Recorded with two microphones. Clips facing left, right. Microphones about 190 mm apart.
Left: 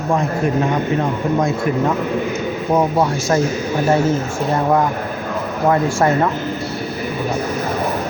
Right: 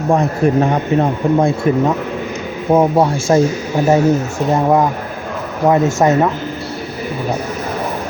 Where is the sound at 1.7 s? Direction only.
25° right (ahead or behind).